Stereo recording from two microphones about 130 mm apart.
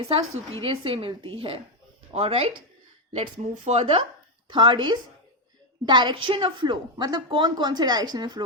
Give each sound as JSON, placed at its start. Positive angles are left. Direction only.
{"t": 0.1, "sound": "a woman's voice", "side_deg": -45}
{"t": 3.3, "sound": "speech", "side_deg": -75}
{"t": 3.8, "sound": "a woman's voice", "side_deg": -45}